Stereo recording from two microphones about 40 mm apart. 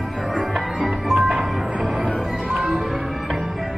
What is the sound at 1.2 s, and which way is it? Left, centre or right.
Music, centre.